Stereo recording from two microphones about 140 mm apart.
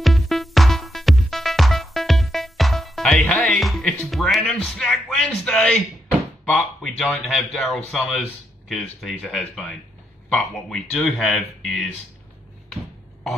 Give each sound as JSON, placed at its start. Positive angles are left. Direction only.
{"t": 0.0, "sound": "music", "side_deg": 0}
{"t": 4.5, "sound": "speech", "side_deg": 5}